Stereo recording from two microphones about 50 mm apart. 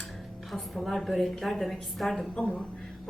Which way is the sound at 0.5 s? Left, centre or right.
Centre.